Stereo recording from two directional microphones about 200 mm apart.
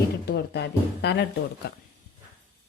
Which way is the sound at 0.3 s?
55° left (ahead or behind).